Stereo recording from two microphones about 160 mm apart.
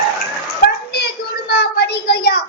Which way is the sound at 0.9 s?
90° left.